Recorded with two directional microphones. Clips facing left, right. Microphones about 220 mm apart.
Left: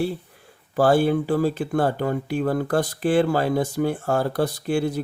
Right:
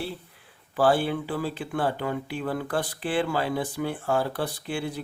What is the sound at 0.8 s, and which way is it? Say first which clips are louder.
Speech: left 5 dB; 45° left (ahead or behind).